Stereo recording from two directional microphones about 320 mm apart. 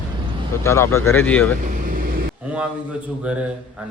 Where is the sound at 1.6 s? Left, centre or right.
Right.